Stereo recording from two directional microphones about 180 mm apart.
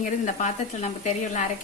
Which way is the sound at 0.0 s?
45° left (ahead or behind).